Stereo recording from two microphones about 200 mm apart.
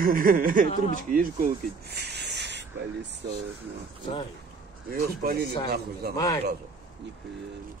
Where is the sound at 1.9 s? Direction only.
55° right (ahead or behind).